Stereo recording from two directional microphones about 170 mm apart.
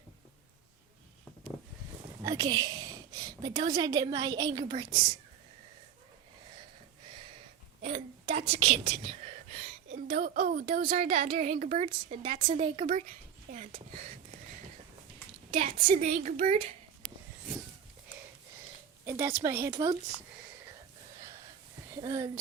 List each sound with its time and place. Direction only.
2.2 s a woman's voice: 25° right (ahead or behind)
7.8 s whispering: 40° right (ahead or behind)
11.0 s a woman's voice: 40° right (ahead or behind)
13.5 s a woman's voice: 45° right (ahead or behind)
15.5 s a woman's voice: 50° right (ahead or behind)
19.0 s a woman's voice: 15° right (ahead or behind)
22.0 s speech: 25° right (ahead or behind)